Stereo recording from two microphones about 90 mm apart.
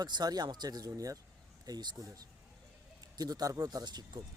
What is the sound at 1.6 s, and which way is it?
Speech, 50° right (ahead or behind).